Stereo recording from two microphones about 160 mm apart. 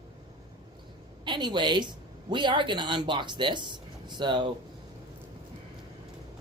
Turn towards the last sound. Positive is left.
turn(degrees=-30)  # may be behind; listen again after turning